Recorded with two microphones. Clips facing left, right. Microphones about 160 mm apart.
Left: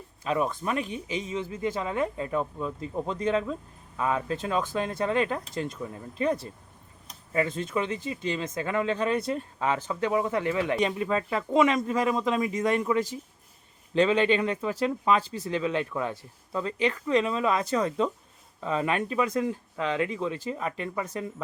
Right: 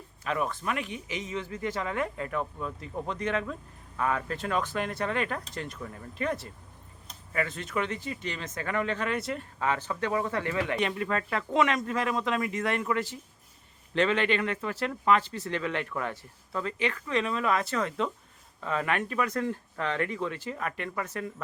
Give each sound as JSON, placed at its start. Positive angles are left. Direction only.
{"t": 0.3, "sound": "speech", "side_deg": 25}
{"t": 7.3, "sound": "speech", "side_deg": 25}